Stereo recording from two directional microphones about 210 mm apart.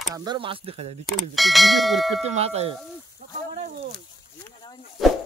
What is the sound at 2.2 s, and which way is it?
Speech, 30° right (ahead or behind).